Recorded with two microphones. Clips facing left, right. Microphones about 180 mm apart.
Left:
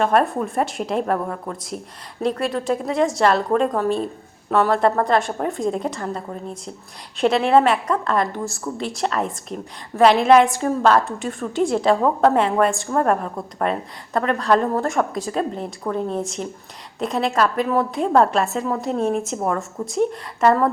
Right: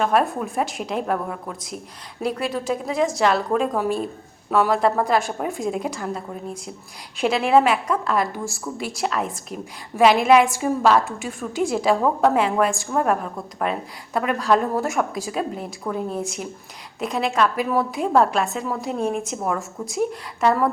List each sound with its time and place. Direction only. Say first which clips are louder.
0.0 s a woman's voice: left 2 dB; centre (ahead or behind)